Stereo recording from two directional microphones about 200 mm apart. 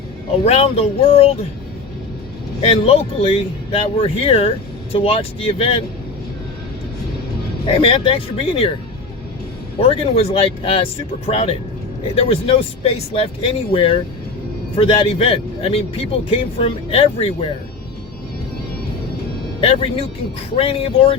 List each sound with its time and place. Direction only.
0.4 s speech: 30° left (ahead or behind)
2.6 s speech: 30° left (ahead or behind)
7.7 s speech: 25° left (ahead or behind)
9.8 s speech: 30° left (ahead or behind)
19.6 s speech: 30° left (ahead or behind)